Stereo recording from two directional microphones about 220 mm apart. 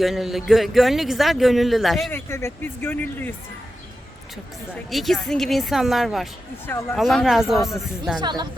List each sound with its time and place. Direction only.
0.0 s a man's voice: centre (ahead or behind)
4.7 s a man's voice: centre (ahead or behind)
6.7 s speech: 15° left (ahead or behind)
6.9 s a man's voice: centre (ahead or behind)
8.2 s speech: 20° right (ahead or behind)